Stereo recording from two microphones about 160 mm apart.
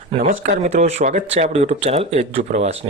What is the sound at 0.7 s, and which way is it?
Speech, 45° right (ahead or behind).